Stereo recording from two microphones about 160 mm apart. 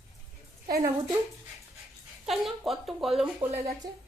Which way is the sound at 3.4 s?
25° right (ahead or behind).